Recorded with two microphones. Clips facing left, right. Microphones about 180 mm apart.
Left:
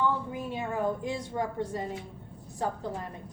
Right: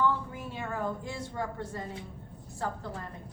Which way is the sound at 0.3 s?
15° left (ahead or behind).